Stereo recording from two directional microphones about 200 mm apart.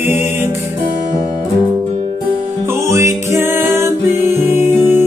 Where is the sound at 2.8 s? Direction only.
15° right (ahead or behind).